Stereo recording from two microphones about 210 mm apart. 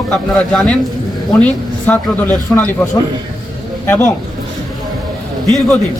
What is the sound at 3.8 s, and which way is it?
Speech, 10° left (ahead or behind).